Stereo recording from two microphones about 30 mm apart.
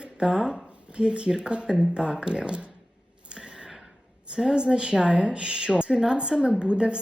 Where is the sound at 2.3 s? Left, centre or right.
Right.